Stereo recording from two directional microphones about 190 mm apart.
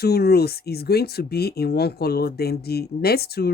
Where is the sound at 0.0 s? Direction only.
55° left (ahead or behind).